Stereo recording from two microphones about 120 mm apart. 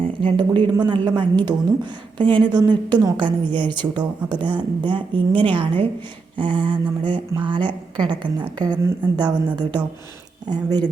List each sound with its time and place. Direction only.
0.0 s a woman's voice: 45° right (ahead or behind)
10.5 s a woman's voice: 35° right (ahead or behind)